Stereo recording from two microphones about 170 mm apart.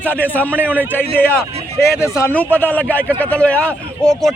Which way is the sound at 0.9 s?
10° left (ahead or behind).